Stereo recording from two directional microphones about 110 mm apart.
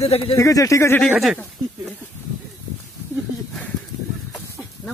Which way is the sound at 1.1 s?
5° right (ahead or behind).